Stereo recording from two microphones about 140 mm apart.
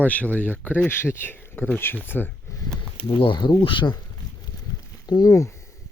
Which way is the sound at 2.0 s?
15° left (ahead or behind).